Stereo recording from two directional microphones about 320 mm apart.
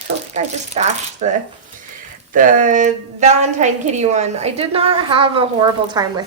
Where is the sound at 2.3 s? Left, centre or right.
Right.